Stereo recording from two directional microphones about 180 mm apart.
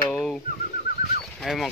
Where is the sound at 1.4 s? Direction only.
Centre (ahead or behind).